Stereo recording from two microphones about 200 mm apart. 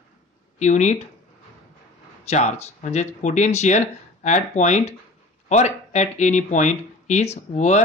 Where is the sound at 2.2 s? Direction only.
35° left (ahead or behind).